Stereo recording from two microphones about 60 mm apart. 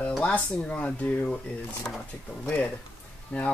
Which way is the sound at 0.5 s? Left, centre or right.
Left.